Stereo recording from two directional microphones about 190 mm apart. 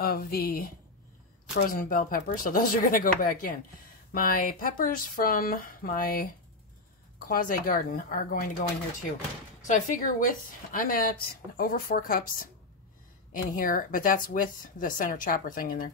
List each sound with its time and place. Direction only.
0.0 s a woman's voice: 50° left (ahead or behind)
9.7 s a woman's voice: 40° left (ahead or behind)
13.3 s a woman's voice: 45° left (ahead or behind)